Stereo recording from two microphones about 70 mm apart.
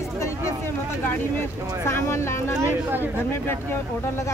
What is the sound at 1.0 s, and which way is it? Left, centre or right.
Speech, left.